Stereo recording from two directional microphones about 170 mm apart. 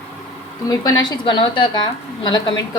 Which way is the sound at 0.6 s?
25° left (ahead or behind).